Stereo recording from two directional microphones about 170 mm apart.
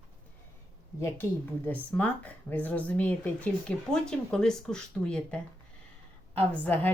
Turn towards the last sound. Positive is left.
turn(degrees=10)  # may be behind; listen again after turning